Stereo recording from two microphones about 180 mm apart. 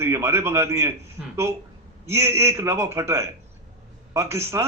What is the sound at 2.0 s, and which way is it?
A man's voice, 15° right (ahead or behind).